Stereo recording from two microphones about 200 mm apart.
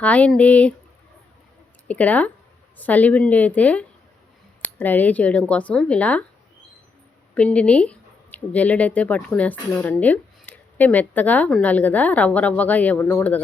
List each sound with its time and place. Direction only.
0.0 s speech: 5° left (ahead or behind)
1.9 s speech: 5° left (ahead or behind)
7.3 s speech: 5° left (ahead or behind)